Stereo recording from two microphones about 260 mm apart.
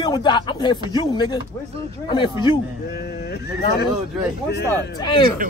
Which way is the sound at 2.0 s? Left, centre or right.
Centre.